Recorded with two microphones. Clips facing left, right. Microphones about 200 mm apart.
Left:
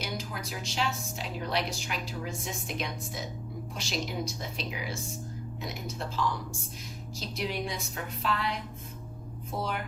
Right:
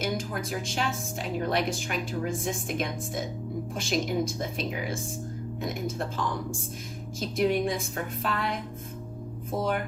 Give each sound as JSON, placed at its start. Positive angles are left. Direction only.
{"t": 0.0, "sound": "speech", "side_deg": -50}